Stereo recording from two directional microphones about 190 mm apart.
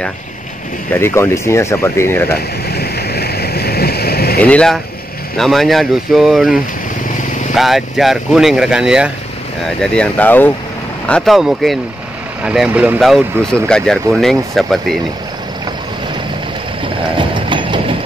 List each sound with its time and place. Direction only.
0.9 s speech: 15° left (ahead or behind)
2.3 s a sound: 55° left (ahead or behind)
4.4 s speech: 5° left (ahead or behind)
9.8 s speech: 5° left (ahead or behind)
17.2 s clip-clop: 25° right (ahead or behind)